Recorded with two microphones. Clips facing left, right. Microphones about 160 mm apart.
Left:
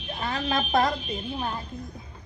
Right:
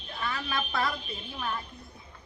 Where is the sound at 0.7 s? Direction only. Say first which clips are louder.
Left 7 dB; 45° left (ahead or behind).